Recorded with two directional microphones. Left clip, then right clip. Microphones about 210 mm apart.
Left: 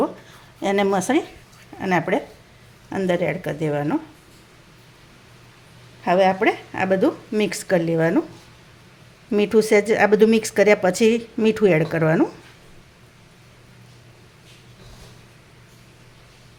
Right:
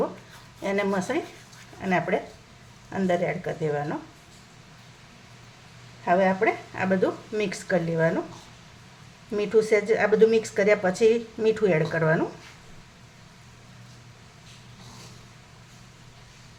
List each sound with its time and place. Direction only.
0.6 s speech: 40° left (ahead or behind)
6.1 s speech: 45° left (ahead or behind)
9.3 s speech: 45° left (ahead or behind)